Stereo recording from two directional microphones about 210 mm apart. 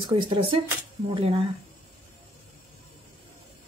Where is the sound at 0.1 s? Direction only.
25° right (ahead or behind).